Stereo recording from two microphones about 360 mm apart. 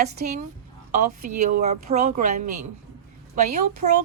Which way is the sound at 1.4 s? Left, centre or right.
Centre.